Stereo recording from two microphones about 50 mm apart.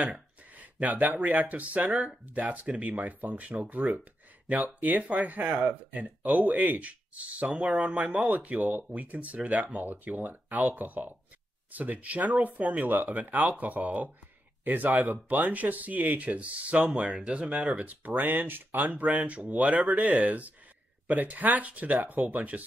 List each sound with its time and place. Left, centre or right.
0.1 s a sound: right
1.2 s speech: right
18.9 s speech: right